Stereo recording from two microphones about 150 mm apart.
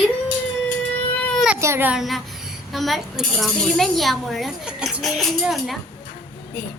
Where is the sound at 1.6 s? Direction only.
15° right (ahead or behind); by 5.8 s centre (ahead or behind).